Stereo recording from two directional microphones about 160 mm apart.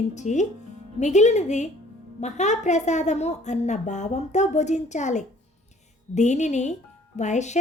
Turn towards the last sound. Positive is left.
turn(degrees=45)  # may be behind; listen again after turning